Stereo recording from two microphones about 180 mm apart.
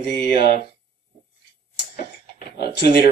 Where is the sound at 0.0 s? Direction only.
70° left (ahead or behind).